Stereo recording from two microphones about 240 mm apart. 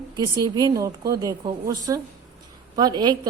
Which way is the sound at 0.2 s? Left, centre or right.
Centre.